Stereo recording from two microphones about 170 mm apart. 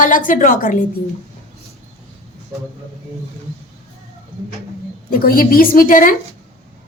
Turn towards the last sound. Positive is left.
turn(degrees=55)  # may be behind; listen again after turning